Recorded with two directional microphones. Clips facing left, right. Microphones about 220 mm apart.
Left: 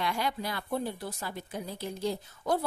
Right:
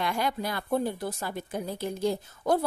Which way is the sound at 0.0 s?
50° right (ahead or behind).